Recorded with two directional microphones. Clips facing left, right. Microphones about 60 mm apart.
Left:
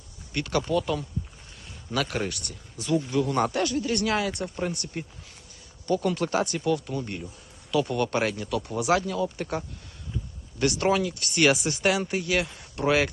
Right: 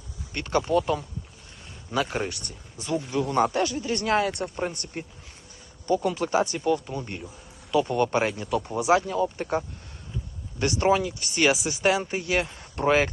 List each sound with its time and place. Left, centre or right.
0.3 s speech: right
3.2 s speech: centre; by 4.3 s right
4.3 s speech: right
4.9 s speech: right
8.5 s speech: right
11.5 s speech: centre
11.8 s speech: right